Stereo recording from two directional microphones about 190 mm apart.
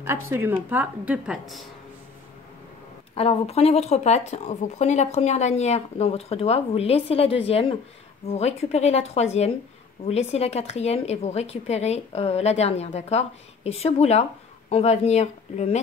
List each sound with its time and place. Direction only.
0.0 s a woman's voice: 15° right (ahead or behind)
3.2 s speech: 30° left (ahead or behind)